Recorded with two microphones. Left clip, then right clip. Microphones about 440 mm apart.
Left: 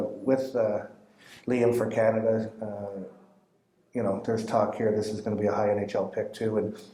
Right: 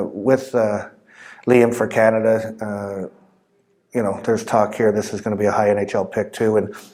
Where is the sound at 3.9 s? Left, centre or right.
Right.